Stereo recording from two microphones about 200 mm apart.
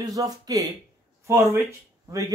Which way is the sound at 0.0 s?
15° right (ahead or behind).